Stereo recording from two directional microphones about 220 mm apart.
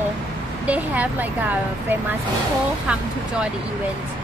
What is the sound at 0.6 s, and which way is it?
Speech, 5° right (ahead or behind).